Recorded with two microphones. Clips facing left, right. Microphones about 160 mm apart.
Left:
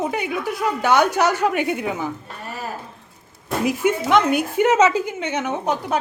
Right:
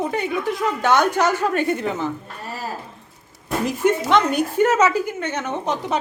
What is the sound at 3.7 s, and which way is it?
A woman's voice, 10° left (ahead or behind).